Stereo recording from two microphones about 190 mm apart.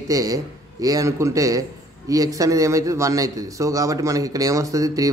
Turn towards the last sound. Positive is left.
turn(degrees=-15)  # may be behind; listen again after turning